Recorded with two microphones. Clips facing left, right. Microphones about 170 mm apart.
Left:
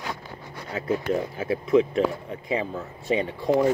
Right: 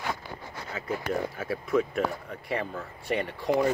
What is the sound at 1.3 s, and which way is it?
Speech, 25° left (ahead or behind).